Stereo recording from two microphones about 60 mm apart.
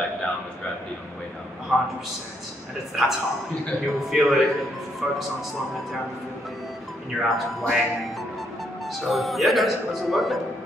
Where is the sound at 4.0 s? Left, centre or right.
Centre.